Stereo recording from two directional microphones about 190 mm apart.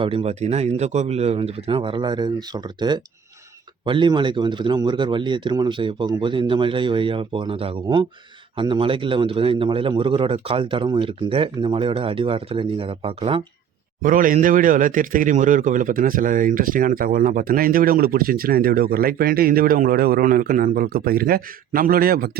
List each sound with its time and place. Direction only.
0.0 s a man's voice: 30° right (ahead or behind)
14.0 s a man's voice: 45° right (ahead or behind)